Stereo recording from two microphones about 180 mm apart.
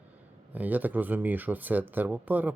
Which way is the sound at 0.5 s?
10° right (ahead or behind).